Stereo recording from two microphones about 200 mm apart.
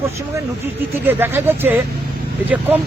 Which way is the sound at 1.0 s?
10° right (ahead or behind).